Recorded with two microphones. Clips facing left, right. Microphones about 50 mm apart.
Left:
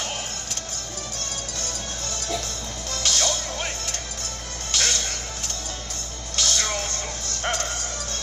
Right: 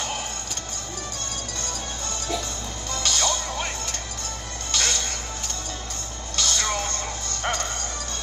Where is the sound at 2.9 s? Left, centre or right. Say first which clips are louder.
Even; centre.